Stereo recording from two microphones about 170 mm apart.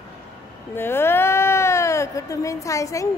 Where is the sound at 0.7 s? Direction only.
15° left (ahead or behind).